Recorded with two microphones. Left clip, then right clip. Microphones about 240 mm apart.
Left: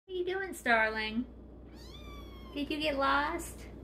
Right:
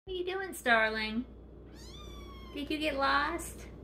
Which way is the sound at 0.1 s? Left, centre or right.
Centre.